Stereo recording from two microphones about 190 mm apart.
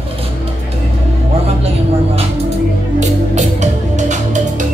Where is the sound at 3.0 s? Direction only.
40° right (ahead or behind).